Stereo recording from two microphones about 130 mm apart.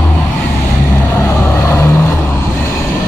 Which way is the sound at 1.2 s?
20° left (ahead or behind).